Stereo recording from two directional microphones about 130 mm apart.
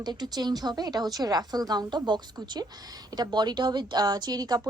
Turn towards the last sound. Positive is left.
turn(degrees=-30)  # may be behind; listen again after turning